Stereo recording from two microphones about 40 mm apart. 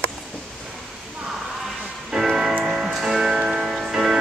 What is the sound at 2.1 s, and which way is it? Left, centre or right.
Music, centre.